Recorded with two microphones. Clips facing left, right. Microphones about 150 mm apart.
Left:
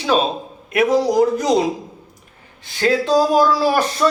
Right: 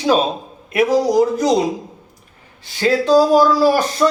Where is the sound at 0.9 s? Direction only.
40° right (ahead or behind).